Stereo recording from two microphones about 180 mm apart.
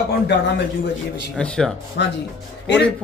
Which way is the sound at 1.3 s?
5° left (ahead or behind).